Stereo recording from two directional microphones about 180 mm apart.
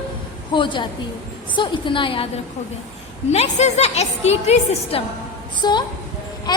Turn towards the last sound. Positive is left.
turn(degrees=20)  # may be behind; listen again after turning